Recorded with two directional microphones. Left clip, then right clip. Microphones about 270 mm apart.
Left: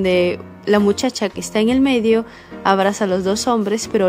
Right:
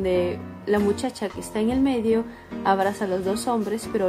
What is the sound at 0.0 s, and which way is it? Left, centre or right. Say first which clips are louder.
Speech: left 7 dB; left.